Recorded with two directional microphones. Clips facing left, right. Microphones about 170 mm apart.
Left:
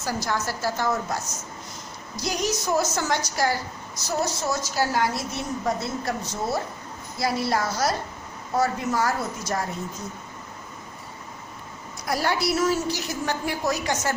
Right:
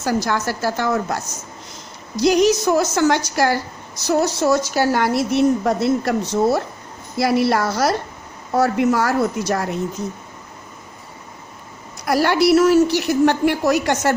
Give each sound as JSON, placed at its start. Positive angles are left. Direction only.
{"t": 0.0, "sound": "speech", "side_deg": -70}
{"t": 12.0, "sound": "speech", "side_deg": -75}